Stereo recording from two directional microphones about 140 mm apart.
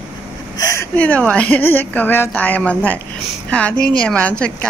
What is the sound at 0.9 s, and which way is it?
Speech, 10° left (ahead or behind).